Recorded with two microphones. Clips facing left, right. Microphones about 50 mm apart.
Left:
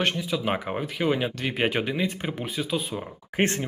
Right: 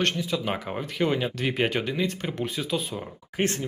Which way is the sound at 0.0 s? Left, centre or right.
Centre.